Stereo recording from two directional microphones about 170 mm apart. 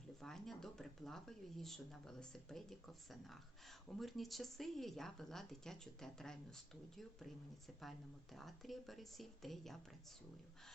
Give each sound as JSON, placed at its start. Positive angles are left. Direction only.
{"t": 0.2, "sound": "speech", "side_deg": 5}